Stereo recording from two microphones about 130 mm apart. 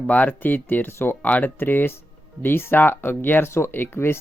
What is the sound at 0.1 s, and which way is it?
Speech, 10° left (ahead or behind).